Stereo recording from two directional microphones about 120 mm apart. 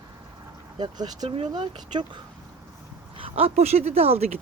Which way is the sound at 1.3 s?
50° right (ahead or behind).